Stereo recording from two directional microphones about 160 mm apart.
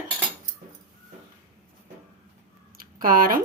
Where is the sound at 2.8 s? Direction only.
60° right (ahead or behind).